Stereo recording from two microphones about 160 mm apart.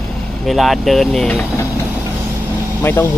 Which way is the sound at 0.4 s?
Centre (ahead or behind).